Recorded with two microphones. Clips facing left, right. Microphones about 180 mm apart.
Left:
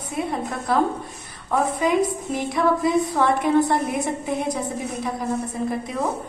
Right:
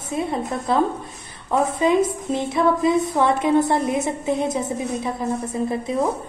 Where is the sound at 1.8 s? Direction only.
25° right (ahead or behind).